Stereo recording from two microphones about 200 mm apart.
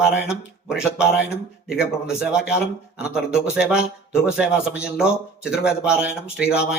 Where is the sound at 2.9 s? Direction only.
5° right (ahead or behind).